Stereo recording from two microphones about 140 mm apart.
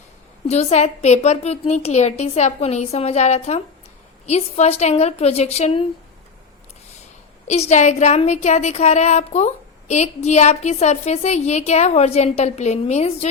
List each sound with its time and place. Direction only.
0.4 s speech: 50° left (ahead or behind)
7.4 s speech: 50° left (ahead or behind)